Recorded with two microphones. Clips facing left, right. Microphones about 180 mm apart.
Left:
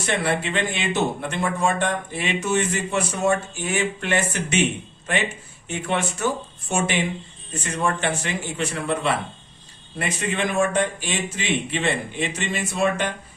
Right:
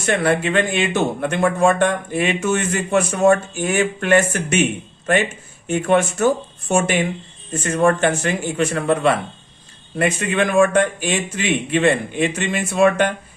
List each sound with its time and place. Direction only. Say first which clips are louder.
0.0 s a man's voice: right 5 dB; 50° right (ahead or behind)
5.6 s a man's voice: right 8 dB; 50° right (ahead or behind)